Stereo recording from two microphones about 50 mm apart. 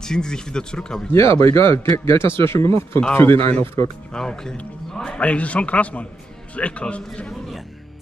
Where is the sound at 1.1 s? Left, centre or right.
Left.